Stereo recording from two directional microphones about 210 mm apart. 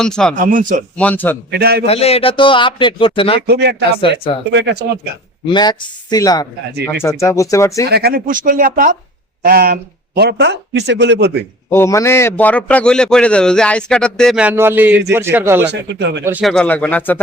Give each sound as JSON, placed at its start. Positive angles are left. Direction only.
{"t": 0.0, "sound": "a man's voice", "side_deg": 5}
{"t": 0.3, "sound": "speech", "side_deg": -40}
{"t": 0.9, "sound": "speech", "side_deg": 10}
{"t": 1.5, "sound": "speech", "side_deg": -50}
{"t": 1.9, "sound": "a man's voice", "side_deg": 30}
{"t": 3.4, "sound": "speech", "side_deg": -50}
{"t": 5.5, "sound": "a man's voice", "side_deg": 20}
{"t": 7.9, "sound": "speech", "side_deg": -50}
{"t": 11.7, "sound": "a man's voice", "side_deg": 15}
{"t": 15.6, "sound": "speech", "side_deg": -55}
{"t": 16.2, "sound": "a man's voice", "side_deg": -10}
{"t": 16.5, "sound": "speech", "side_deg": 5}